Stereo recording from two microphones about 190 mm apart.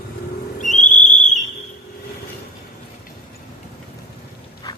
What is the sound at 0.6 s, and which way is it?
Whistle, 40° left (ahead or behind).